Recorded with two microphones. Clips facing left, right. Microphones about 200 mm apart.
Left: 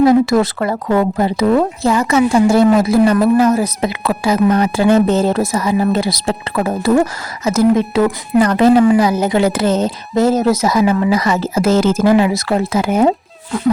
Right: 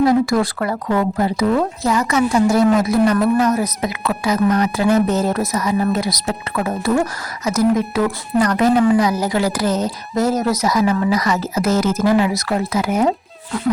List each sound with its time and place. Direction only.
0.0 s speech: 25° left (ahead or behind)